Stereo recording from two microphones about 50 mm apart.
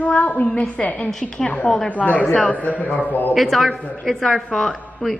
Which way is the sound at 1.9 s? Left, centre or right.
Left.